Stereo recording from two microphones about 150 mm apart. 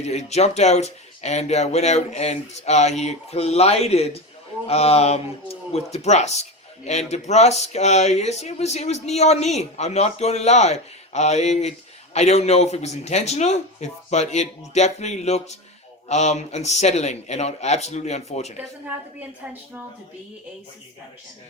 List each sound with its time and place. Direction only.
0.0 s speech: 45° left (ahead or behind)